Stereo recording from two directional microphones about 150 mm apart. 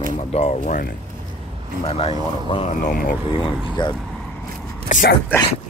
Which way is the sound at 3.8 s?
30° left (ahead or behind).